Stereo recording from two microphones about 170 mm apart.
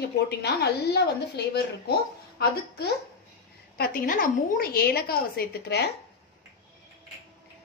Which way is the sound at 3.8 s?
55° left (ahead or behind).